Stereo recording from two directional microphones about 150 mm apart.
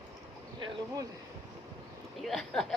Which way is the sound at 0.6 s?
25° right (ahead or behind).